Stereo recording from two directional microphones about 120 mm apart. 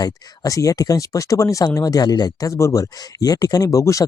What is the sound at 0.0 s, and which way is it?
Speech, 30° left (ahead or behind).